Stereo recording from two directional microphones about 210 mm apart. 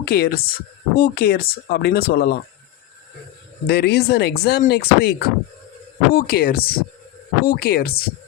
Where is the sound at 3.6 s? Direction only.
50° left (ahead or behind).